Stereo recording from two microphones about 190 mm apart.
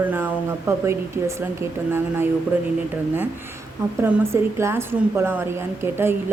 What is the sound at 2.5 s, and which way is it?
Speech, 10° right (ahead or behind).